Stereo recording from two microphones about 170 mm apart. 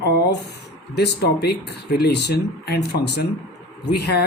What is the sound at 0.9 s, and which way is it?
Speech, 75° left (ahead or behind).